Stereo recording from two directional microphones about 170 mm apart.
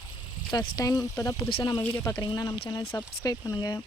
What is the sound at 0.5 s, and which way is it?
Speech, 25° left (ahead or behind).